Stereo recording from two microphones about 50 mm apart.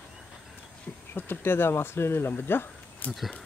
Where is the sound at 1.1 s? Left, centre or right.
Left.